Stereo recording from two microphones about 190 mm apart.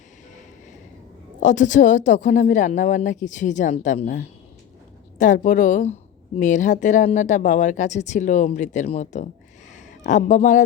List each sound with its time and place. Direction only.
1.4 s a woman's voice: 40° left (ahead or behind)